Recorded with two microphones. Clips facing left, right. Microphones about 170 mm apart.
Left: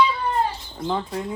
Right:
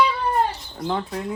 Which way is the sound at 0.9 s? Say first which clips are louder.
Even; centre (ahead or behind).